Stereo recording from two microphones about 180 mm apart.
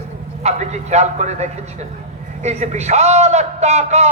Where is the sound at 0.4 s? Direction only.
40° right (ahead or behind).